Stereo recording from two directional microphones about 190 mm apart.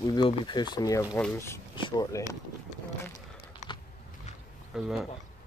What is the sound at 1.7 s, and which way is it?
Speech, 20° left (ahead or behind).